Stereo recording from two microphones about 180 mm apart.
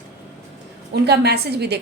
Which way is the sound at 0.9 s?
65° right (ahead or behind).